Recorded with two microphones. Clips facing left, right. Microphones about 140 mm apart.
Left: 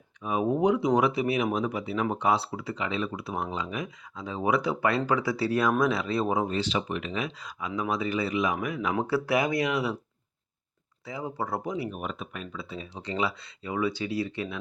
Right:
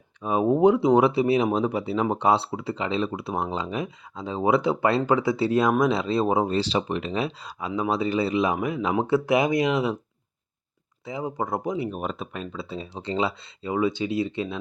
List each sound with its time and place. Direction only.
0.2 s speech: 30° right (ahead or behind)
11.0 s speech: 20° right (ahead or behind)